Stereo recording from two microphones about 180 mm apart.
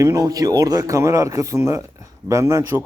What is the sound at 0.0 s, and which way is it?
Speech, 20° right (ahead or behind).